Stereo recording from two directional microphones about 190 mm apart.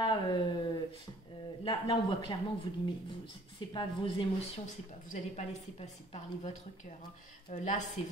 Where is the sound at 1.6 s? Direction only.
25° left (ahead or behind).